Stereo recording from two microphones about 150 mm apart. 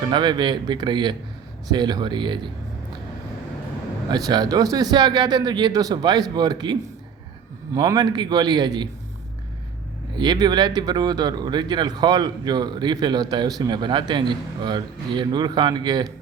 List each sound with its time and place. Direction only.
0.1 s speech: 30° right (ahead or behind)
4.1 s speech: 25° right (ahead or behind)
10.2 s speech: 30° right (ahead or behind)